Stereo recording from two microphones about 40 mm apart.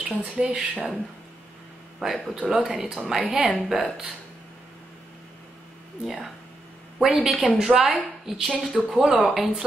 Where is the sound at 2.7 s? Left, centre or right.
Centre.